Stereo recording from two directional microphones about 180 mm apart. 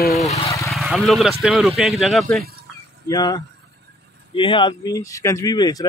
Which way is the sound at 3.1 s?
20° left (ahead or behind).